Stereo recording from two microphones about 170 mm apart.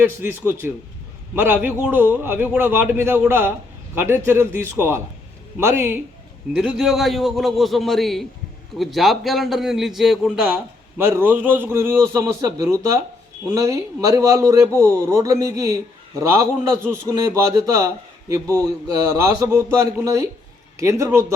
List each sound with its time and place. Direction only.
0.0 s a man's voice: 10° right (ahead or behind)
10.9 s a man's voice: 15° right (ahead or behind)